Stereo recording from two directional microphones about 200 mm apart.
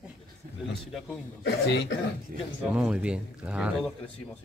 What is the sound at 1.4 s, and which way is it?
Speech, 55° left (ahead or behind).